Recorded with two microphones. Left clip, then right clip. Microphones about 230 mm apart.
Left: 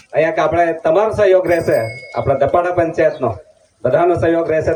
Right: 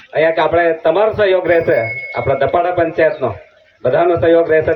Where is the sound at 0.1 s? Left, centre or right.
Left.